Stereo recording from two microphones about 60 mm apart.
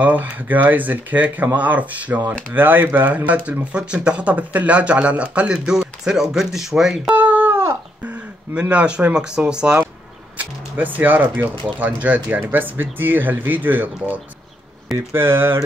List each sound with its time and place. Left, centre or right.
0.0 s speech: right
3.7 s speech: centre
7.2 s a sound: right
8.5 s speech: centre
10.3 s speech: right
15.0 s speech: right